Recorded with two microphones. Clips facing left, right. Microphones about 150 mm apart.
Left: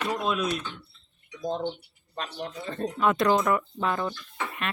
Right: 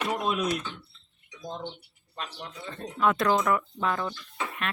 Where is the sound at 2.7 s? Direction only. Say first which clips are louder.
Left 8 dB; 35° left (ahead or behind).